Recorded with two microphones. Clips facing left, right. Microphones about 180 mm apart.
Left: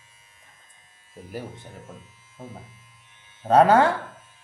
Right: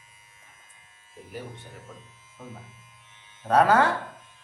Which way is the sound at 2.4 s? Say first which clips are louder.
Left 2 dB; 30° left (ahead or behind).